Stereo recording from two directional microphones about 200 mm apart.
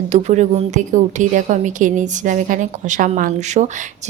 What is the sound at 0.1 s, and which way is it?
A woman's voice, 35° right (ahead or behind).